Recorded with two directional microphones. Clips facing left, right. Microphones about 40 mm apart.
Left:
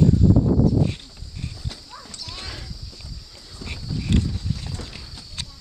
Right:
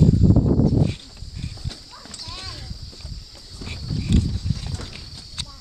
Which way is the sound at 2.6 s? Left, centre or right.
Centre.